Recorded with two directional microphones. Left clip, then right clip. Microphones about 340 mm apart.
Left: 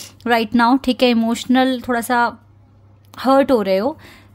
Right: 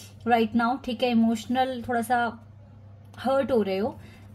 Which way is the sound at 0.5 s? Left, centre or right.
Left.